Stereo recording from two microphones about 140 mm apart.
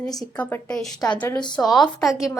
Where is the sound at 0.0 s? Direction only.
5° left (ahead or behind).